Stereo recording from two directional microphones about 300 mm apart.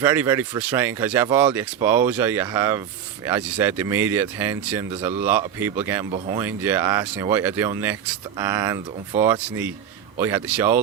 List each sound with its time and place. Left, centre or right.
0.0 s speech: centre
4.9 s speech: centre
5.2 s speech: centre
6.1 s speech: centre
6.4 s speech: centre